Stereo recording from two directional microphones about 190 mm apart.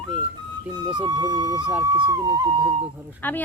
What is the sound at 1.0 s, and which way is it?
Speech, 20° right (ahead or behind).